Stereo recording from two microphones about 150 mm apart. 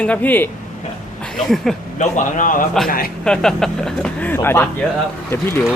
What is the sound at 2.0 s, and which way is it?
Speech, 55° left (ahead or behind).